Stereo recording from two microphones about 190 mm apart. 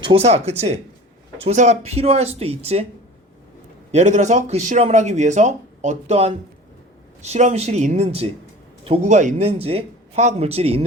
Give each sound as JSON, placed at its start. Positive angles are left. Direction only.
{"t": 0.0, "sound": "speech", "side_deg": -30}
{"t": 3.9, "sound": "speech", "side_deg": -40}